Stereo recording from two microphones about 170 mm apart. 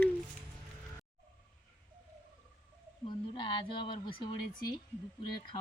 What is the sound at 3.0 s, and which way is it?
Speech, 30° left (ahead or behind).